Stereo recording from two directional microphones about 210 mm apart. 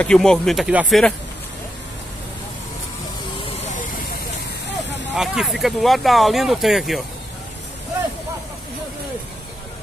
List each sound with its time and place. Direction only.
0.0 s speech: 5° left (ahead or behind)
3.4 s hiss: 35° left (ahead or behind)
5.1 s speech: centre (ahead or behind)